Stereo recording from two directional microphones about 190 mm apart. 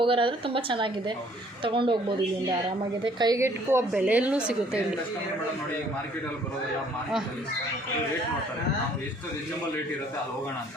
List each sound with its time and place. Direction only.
0.0 s a woman's voice: 30° right (ahead or behind)
3.2 s a woman's voice: 20° right (ahead or behind)